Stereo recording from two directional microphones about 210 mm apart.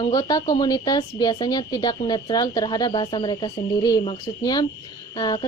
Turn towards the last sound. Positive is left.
turn(degrees=20)  # may be behind; listen again after turning